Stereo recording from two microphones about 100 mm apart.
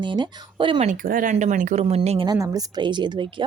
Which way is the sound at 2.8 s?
50° right (ahead or behind).